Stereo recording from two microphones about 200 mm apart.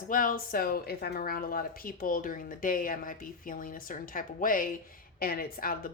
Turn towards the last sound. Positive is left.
turn(degrees=45)  # may be behind; listen again after turning